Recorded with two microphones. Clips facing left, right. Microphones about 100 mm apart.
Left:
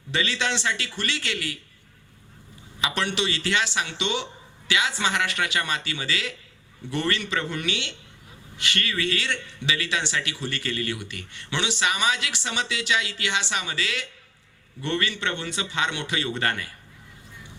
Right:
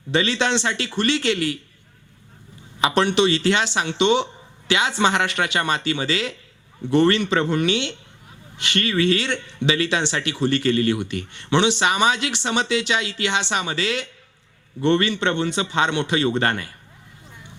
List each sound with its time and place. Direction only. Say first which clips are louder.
0.1 s speech: right 6 dB; 25° right (ahead or behind)
2.8 s speech: right 9 dB; 25° right (ahead or behind)